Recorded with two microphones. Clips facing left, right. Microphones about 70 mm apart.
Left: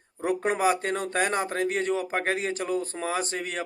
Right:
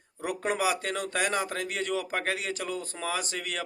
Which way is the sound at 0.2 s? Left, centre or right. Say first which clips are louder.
Left 4 dB; left.